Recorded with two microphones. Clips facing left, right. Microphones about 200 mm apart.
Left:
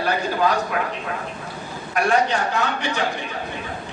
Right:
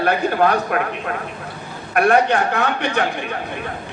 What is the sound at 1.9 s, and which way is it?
A man's voice, 60° right (ahead or behind).